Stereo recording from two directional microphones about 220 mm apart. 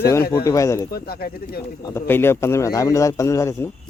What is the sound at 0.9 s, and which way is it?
Speech, 45° left (ahead or behind).